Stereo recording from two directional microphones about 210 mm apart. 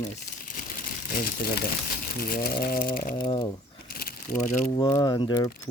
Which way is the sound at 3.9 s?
45° left (ahead or behind).